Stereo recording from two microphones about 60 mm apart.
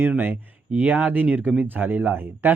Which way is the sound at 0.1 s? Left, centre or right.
Right.